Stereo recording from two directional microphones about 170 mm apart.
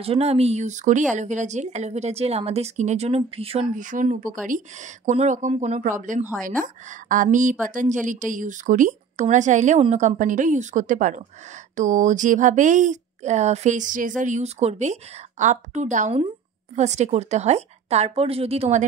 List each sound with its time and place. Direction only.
0.0 s a woman's voice: 35° right (ahead or behind)